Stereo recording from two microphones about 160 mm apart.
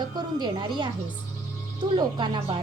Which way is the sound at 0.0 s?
25° right (ahead or behind).